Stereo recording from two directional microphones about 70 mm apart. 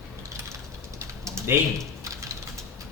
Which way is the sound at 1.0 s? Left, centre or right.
Right.